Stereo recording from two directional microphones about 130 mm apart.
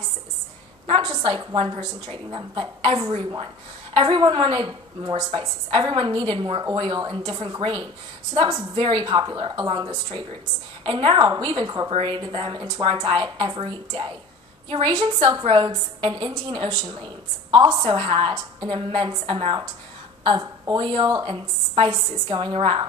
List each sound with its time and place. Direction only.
0.8 s a woman's voice: 35° right (ahead or behind)